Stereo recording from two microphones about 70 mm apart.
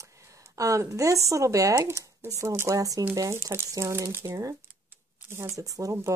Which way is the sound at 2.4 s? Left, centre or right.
Right.